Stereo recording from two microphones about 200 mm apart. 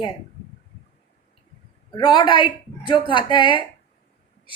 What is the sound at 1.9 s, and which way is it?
Speech, 25° left (ahead or behind).